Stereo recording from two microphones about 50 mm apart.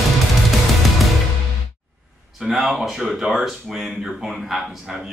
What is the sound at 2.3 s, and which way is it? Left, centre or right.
A man's voice, centre.